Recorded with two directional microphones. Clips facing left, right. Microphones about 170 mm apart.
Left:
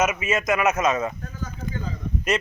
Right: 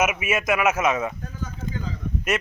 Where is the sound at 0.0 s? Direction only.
10° right (ahead or behind).